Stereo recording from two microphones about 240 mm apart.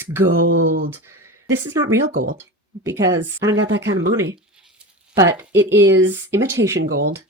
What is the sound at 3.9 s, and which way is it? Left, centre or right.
Speech, right.